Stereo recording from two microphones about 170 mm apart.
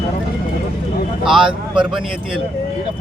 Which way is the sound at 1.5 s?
30° right (ahead or behind).